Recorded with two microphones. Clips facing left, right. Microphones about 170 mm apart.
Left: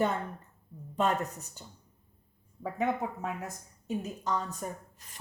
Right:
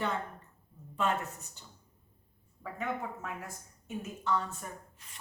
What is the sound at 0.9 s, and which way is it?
Speech, 40° left (ahead or behind).